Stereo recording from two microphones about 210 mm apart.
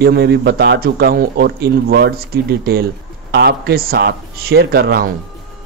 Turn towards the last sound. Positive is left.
turn(degrees=-45)  # may be behind; listen again after turning